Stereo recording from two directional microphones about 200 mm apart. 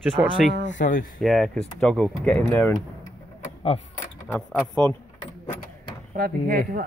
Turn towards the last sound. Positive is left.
turn(degrees=-45)  # may be behind; listen again after turning